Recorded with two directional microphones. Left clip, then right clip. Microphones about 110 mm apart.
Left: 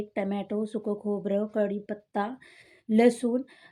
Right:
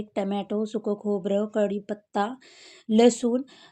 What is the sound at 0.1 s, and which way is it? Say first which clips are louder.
Speech: right 5 dB; 40° right (ahead or behind).